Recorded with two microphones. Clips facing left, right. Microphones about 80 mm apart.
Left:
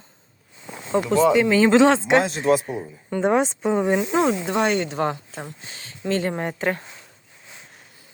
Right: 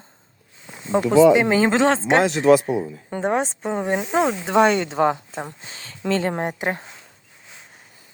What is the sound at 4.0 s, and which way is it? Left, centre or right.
Speech, centre.